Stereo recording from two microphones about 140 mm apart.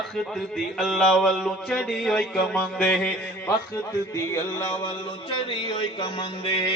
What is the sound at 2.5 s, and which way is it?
Music, 10° left (ahead or behind).